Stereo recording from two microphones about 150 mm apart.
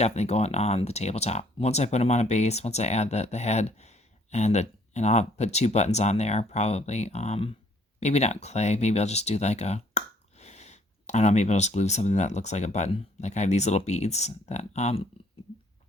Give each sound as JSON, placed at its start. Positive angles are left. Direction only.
{"t": 0.0, "sound": "speech", "side_deg": 45}